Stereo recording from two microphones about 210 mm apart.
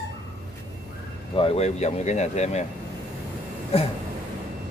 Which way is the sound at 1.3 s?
25° left (ahead or behind).